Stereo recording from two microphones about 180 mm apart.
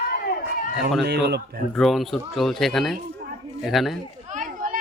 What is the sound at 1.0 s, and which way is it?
Speech, 65° right (ahead or behind).